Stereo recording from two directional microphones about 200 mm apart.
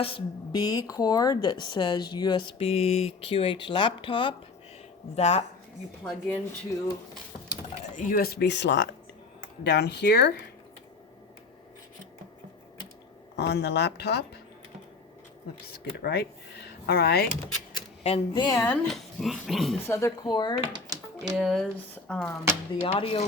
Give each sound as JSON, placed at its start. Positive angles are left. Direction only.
{"t": 0.0, "sound": "a woman's voice", "side_deg": 25}
{"t": 6.1, "sound": "speech", "side_deg": 5}
{"t": 7.9, "sound": "speech", "side_deg": 40}
{"t": 13.3, "sound": "speech", "side_deg": 55}
{"t": 15.6, "sound": "speech", "side_deg": 55}
{"t": 18.0, "sound": "speech", "side_deg": 30}
{"t": 18.4, "sound": "speech", "side_deg": 10}
{"t": 19.9, "sound": "a woman's voice", "side_deg": 15}
{"t": 20.9, "sound": "a sound", "side_deg": -20}
{"t": 21.3, "sound": "speech", "side_deg": 0}
{"t": 22.7, "sound": "a woman's voice", "side_deg": 25}